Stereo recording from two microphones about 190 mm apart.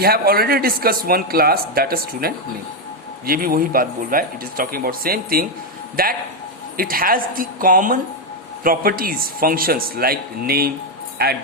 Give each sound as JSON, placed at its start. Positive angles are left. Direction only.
{"t": 0.0, "sound": "speech", "side_deg": -55}